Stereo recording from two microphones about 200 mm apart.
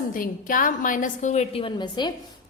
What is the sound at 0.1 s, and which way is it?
A woman's voice, 45° left (ahead or behind).